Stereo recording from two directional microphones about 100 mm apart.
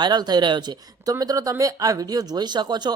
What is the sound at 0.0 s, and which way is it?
Speech, 45° right (ahead or behind).